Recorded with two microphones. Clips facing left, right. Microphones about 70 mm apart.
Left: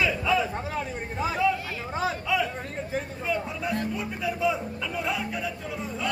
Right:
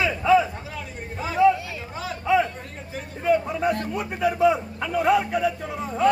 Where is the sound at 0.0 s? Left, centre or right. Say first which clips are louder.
Right 6 dB; right.